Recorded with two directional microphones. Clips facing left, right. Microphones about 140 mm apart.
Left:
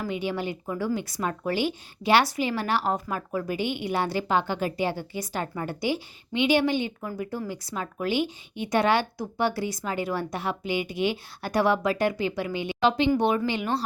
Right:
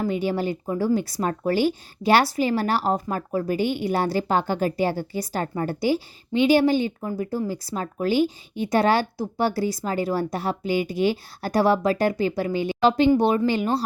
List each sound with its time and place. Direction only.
0.0 s a woman's voice: 40° right (ahead or behind)